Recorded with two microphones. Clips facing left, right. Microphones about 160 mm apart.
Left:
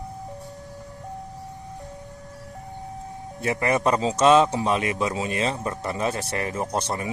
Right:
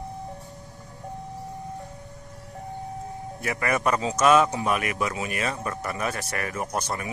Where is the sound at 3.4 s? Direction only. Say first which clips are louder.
Left 3 dB; 25° left (ahead or behind).